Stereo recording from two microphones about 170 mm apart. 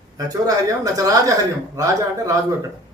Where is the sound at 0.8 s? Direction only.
20° right (ahead or behind).